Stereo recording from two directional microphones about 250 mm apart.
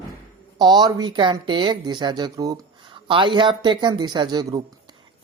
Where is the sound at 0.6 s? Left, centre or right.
Centre.